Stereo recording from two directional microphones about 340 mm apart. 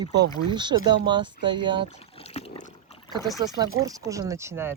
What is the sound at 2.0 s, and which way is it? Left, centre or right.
Rowboat, centre.